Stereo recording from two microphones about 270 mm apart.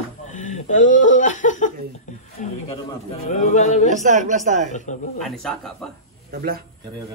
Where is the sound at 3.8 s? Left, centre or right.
Right.